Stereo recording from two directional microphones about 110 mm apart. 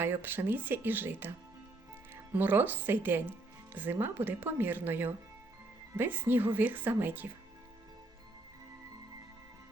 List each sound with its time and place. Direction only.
0.0 s speech: 20° right (ahead or behind)